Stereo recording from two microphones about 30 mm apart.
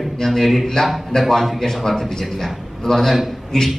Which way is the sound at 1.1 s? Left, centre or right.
Left.